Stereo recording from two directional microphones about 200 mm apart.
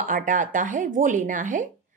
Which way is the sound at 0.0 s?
40° right (ahead or behind).